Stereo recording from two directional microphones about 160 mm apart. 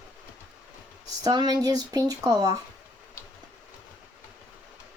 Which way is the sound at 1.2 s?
25° right (ahead or behind).